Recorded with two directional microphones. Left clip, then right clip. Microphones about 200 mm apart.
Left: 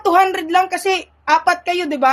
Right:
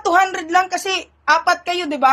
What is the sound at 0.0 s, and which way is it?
A woman's voice, 30° left (ahead or behind).